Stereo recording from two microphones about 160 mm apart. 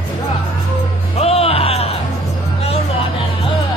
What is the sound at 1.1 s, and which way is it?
Music, 40° left (ahead or behind).